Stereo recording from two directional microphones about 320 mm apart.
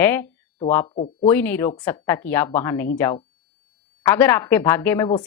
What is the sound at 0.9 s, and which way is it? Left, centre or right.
Speech, left.